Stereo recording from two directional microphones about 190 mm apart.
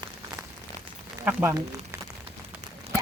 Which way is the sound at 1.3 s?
10° right (ahead or behind).